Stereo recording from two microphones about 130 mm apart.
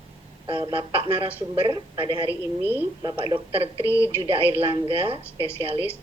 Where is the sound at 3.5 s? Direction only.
45° right (ahead or behind).